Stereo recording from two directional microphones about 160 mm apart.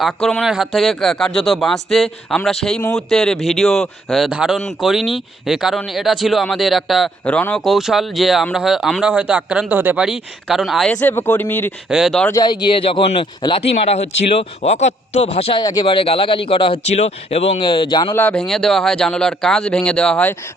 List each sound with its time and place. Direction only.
0.0 s speech: centre (ahead or behind)
11.9 s speech: centre (ahead or behind)
12.3 s speech: 25° left (ahead or behind); by 14.9 s 45° left (ahead or behind)
15.6 s speech: 30° left (ahead or behind)
17.6 s speech: 30° left (ahead or behind)
18.1 s speech: 10° left (ahead or behind)